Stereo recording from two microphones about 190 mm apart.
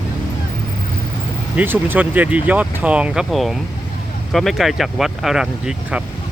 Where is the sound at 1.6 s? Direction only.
10° right (ahead or behind).